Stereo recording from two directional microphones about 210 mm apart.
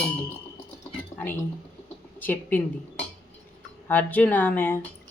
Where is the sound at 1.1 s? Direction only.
15° left (ahead or behind).